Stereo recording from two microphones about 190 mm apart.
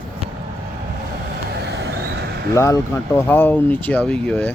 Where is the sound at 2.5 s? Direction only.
15° left (ahead or behind).